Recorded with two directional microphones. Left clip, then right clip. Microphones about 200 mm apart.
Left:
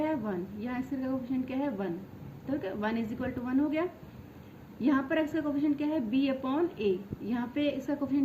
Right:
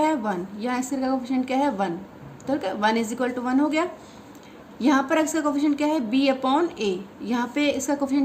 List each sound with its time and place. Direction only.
0.0 s a woman's voice: 50° right (ahead or behind)